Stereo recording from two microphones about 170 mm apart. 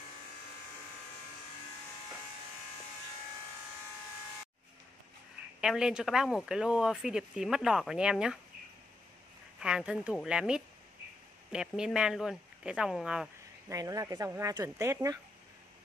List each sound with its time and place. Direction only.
5.6 s speech: 5° right (ahead or behind)
9.6 s speech: 5° right (ahead or behind)
13.7 s speech: 20° right (ahead or behind)